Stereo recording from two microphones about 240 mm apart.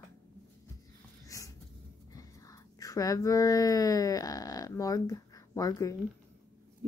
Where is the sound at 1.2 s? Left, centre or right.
Centre.